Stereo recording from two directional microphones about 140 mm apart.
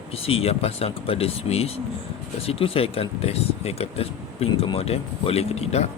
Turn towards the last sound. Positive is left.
turn(degrees=50)  # may be behind; listen again after turning